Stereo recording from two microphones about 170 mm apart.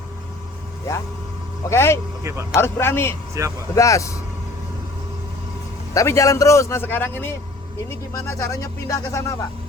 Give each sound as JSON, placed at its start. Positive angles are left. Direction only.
{"t": 1.7, "sound": "speech", "side_deg": 15}
{"t": 2.2, "sound": "speech", "side_deg": -15}
{"t": 2.6, "sound": "speech", "side_deg": 15}
{"t": 3.4, "sound": "speech", "side_deg": -15}
{"t": 3.8, "sound": "speech", "side_deg": 20}
{"t": 5.9, "sound": "speech", "side_deg": 20}